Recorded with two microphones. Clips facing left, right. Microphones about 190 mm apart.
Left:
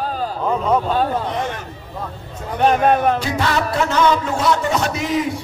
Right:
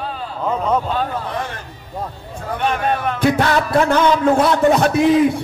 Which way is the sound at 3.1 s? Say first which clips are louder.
Right 4 dB; 55° right (ahead or behind).